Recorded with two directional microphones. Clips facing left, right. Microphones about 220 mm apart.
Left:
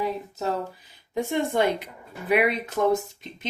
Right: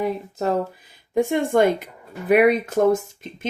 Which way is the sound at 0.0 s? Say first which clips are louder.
Right 4 dB; 55° right (ahead or behind).